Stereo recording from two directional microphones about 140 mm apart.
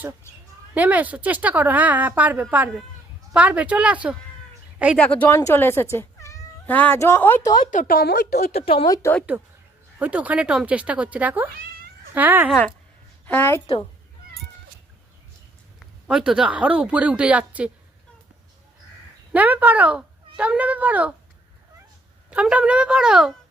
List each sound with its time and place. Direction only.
0.7 s a woman's voice: 10° right (ahead or behind)
4.9 s speech: 10° left (ahead or behind)
7.4 s speech: 30° left (ahead or behind)
7.7 s speech: 80° left
8.6 s speech: 45° left (ahead or behind)
8.9 s a woman's voice: 20° left (ahead or behind)
10.0 s a woman's voice: 10° right (ahead or behind)
13.2 s a woman's voice: 15° left (ahead or behind)
15.8 s a woman's voice: 5° right (ahead or behind)
19.3 s speech: 10° right (ahead or behind)
22.3 s a woman's voice: 10° right (ahead or behind)